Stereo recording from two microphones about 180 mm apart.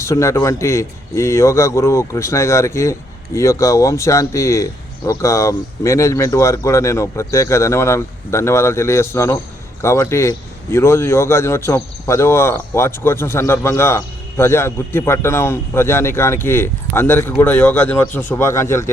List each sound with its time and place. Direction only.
0.0 s a man's voice: 15° left (ahead or behind)